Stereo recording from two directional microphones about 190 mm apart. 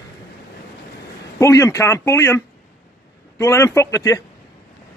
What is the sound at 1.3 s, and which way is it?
Speech, 15° left (ahead or behind).